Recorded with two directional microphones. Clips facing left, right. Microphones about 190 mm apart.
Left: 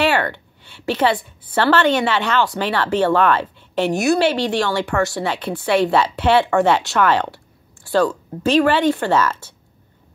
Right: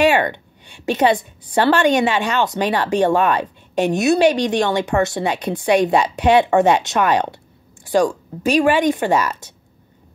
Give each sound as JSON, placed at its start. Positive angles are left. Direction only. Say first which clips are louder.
{"t": 0.0, "sound": "a woman's voice", "louder": "right 3 dB", "side_deg": -15}
{"t": 7.8, "sound": "a sound", "louder": "right 1 dB", "side_deg": -15}
{"t": 8.4, "sound": "a woman's voice", "louder": "even", "side_deg": -15}